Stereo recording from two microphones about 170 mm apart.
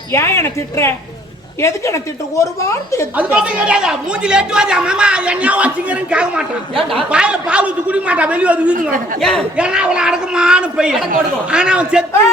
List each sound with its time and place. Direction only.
0.1 s speech: 15° left (ahead or behind)
3.2 s speech: 10° right (ahead or behind)